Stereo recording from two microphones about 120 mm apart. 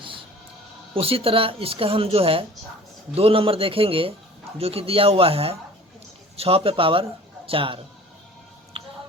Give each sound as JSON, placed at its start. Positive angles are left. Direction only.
{"t": 0.9, "sound": "a man's voice", "side_deg": -50}
{"t": 8.7, "sound": "music", "side_deg": -50}